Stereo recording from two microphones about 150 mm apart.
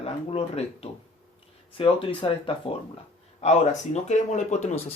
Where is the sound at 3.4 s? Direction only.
50° left (ahead or behind).